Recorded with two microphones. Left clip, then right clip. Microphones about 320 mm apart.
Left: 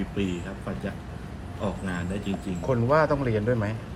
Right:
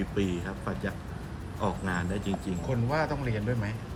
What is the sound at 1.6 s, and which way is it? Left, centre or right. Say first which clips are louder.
Speech: right 1 dB; centre.